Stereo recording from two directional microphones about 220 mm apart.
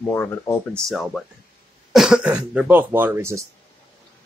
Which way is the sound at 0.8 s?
Centre (ahead or behind).